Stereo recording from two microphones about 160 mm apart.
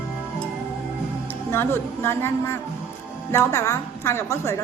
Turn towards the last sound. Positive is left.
turn(degrees=15)  # may be behind; listen again after turning